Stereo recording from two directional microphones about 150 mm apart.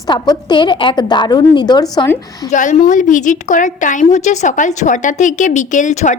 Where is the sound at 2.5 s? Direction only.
50° left (ahead or behind).